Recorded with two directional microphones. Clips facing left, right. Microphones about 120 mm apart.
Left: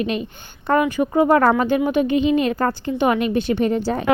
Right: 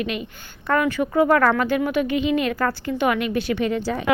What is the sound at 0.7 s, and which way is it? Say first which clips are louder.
Speech: left 3 dB; 20° left (ahead or behind).